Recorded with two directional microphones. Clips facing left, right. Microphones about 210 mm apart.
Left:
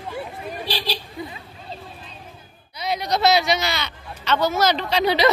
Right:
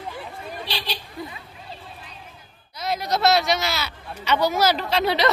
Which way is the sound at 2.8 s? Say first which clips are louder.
Left 1 dB; centre (ahead or behind).